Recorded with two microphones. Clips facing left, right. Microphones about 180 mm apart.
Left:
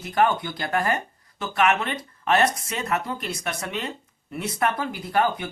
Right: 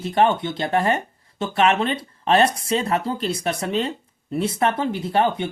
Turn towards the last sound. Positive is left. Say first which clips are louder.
# right 3 dB
turn(degrees=-25)  # may be behind; listen again after turning